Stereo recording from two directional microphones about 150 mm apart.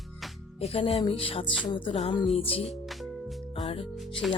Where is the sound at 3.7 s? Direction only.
40° left (ahead or behind).